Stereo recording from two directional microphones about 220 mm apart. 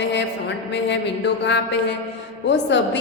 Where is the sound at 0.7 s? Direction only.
55° left (ahead or behind).